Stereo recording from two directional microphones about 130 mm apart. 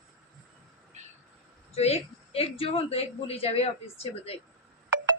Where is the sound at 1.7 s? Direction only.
55° left (ahead or behind).